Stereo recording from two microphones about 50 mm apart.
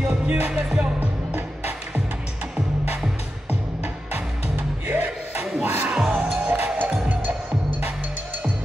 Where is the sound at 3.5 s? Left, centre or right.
Right.